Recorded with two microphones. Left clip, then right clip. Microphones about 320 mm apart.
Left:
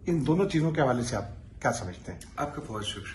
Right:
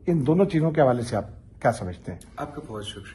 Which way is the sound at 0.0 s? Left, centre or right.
Right.